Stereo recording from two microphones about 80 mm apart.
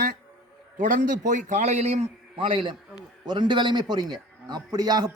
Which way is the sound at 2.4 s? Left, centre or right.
Right.